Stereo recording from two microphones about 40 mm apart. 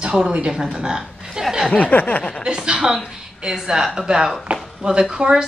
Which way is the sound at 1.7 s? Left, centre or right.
Left.